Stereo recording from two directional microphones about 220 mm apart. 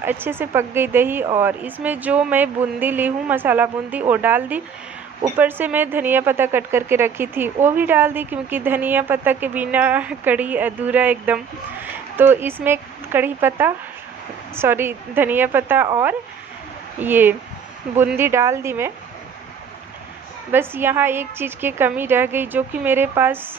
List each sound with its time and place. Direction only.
0.0 s speech: 10° right (ahead or behind)
20.5 s speech: 10° right (ahead or behind)